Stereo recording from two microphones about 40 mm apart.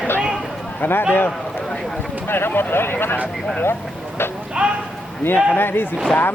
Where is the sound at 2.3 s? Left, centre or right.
Left.